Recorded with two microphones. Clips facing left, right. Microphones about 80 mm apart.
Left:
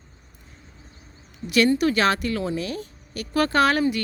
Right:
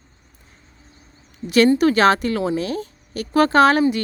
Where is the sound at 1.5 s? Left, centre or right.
Right.